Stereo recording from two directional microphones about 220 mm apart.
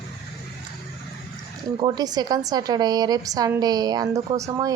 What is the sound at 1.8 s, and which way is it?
A woman's voice, 15° right (ahead or behind).